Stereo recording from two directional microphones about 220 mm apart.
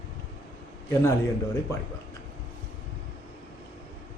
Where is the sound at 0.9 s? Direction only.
15° left (ahead or behind).